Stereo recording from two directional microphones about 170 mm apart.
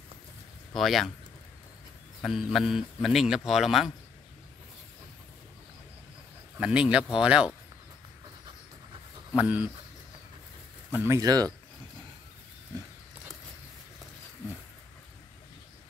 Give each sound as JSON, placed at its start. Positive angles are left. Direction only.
{"t": 0.7, "sound": "a man's voice", "side_deg": 0}
{"t": 2.2, "sound": "a man's voice", "side_deg": 0}
{"t": 6.5, "sound": "a man's voice", "side_deg": -5}
{"t": 9.3, "sound": "speech", "side_deg": -10}
{"t": 10.9, "sound": "speech", "side_deg": -15}